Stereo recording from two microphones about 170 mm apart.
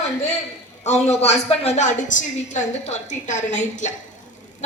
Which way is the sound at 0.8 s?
40° left (ahead or behind).